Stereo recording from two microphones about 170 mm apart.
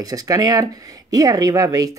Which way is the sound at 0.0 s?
20° right (ahead or behind).